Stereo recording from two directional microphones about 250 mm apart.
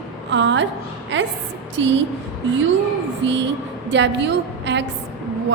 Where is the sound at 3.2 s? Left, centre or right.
Right.